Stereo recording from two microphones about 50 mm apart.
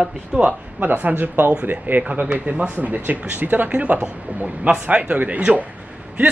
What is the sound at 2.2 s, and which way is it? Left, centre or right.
Speech, right.